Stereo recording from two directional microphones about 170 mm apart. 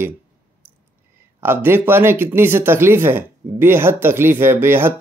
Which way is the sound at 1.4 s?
15° right (ahead or behind).